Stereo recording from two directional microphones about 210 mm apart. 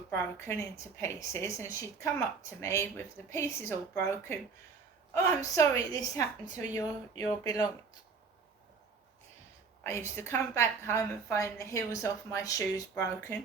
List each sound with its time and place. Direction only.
0.1 s a woman's voice: 15° left (ahead or behind)
5.5 s a woman's voice: 15° left (ahead or behind)
9.8 s a woman's voice: 10° left (ahead or behind)